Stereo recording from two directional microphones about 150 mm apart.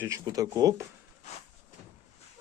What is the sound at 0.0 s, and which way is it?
Speech, 20° right (ahead or behind).